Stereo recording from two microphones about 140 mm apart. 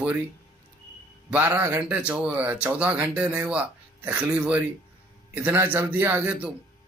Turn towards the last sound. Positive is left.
turn(degrees=-10)  # may be behind; listen again after turning